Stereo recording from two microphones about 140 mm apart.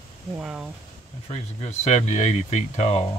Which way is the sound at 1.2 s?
50° left (ahead or behind).